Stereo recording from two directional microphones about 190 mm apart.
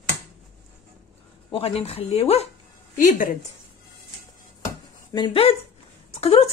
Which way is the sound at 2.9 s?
45° left (ahead or behind).